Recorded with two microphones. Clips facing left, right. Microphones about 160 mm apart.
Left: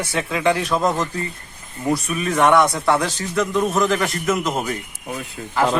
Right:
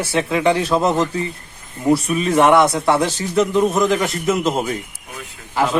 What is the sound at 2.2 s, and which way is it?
A man's voice, 25° right (ahead or behind).